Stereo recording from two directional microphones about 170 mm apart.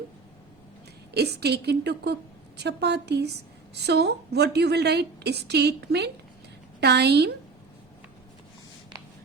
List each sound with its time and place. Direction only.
1.1 s a woman's voice: 70° right (ahead or behind)